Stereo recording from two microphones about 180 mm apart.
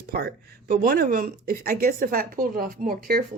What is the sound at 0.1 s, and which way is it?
Speech, 55° right (ahead or behind).